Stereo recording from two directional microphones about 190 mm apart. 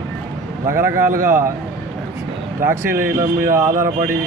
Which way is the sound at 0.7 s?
15° right (ahead or behind).